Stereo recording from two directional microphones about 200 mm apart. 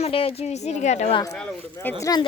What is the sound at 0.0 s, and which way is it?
A woman's voice, 30° left (ahead or behind).